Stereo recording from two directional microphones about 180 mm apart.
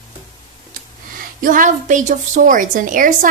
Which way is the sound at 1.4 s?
45° right (ahead or behind).